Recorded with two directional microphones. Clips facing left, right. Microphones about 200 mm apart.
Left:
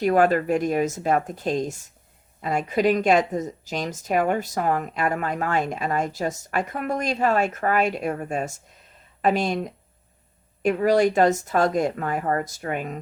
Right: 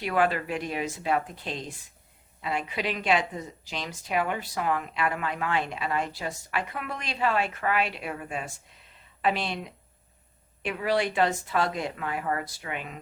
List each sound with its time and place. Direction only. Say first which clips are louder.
0.0 s a woman's voice: left 7 dB; 45° left (ahead or behind)